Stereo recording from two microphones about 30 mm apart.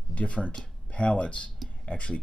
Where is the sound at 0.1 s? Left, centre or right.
Left.